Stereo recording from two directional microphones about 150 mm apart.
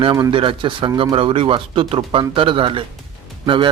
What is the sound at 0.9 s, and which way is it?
Speech, 25° right (ahead or behind).